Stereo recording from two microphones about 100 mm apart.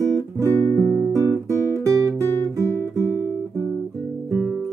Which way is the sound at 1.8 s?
35° right (ahead or behind).